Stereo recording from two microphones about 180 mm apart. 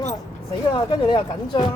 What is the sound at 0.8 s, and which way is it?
Speech, 25° left (ahead or behind).